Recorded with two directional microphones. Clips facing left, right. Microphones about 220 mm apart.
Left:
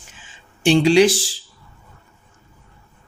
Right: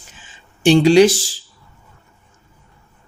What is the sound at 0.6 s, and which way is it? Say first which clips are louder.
Speech: right 3 dB; 40° right (ahead or behind).